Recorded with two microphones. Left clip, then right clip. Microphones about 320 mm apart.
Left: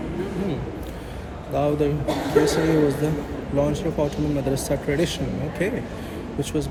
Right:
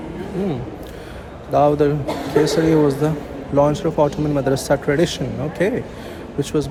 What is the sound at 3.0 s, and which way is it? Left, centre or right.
Speech, centre.